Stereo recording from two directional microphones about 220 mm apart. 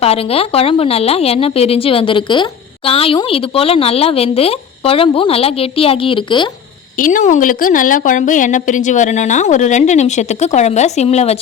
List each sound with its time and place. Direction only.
0.0 s a woman's voice: 25° left (ahead or behind)
7.0 s a woman's voice: 35° left (ahead or behind)